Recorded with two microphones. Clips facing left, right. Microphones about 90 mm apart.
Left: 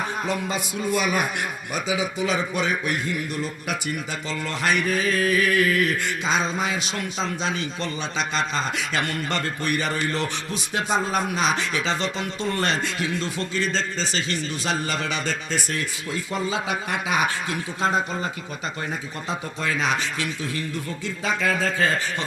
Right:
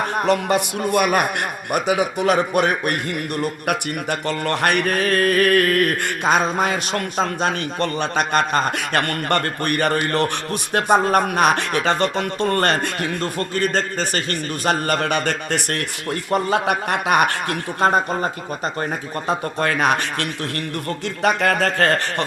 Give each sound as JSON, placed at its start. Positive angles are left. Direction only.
{"t": 0.0, "sound": "a man's voice", "side_deg": -65}
{"t": 19.3, "sound": "a man's voice", "side_deg": -55}